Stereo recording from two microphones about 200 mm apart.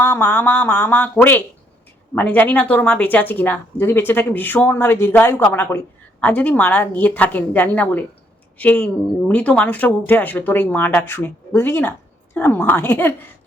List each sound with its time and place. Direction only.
0.0 s speech: 10° left (ahead or behind)